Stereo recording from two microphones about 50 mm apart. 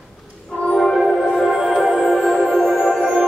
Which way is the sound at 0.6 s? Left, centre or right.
Centre.